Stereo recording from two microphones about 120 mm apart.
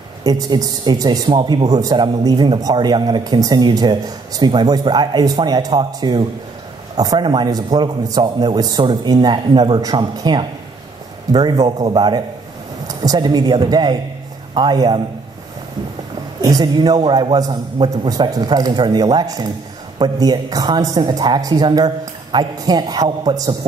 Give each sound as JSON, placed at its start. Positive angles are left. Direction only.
{"t": 0.2, "sound": "speech", "side_deg": -30}
{"t": 16.3, "sound": "speech", "side_deg": -35}